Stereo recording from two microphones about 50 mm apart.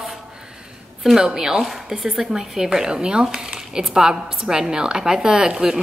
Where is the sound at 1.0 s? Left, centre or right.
Centre.